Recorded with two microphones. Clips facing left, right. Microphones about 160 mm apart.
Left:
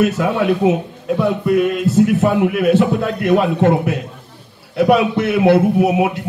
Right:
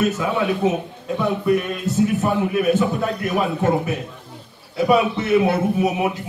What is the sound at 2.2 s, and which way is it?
A man's voice, 75° left (ahead or behind).